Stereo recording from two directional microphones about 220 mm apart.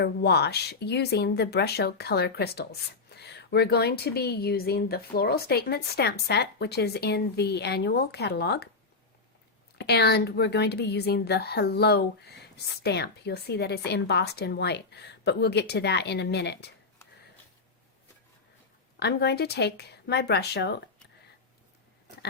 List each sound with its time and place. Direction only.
0.0 s speech: 50° left (ahead or behind)
9.7 s speech: 50° left (ahead or behind)
18.9 s speech: 50° left (ahead or behind)